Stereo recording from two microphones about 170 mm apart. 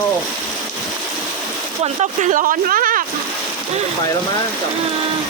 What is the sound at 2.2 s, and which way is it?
Speech, 50° right (ahead or behind).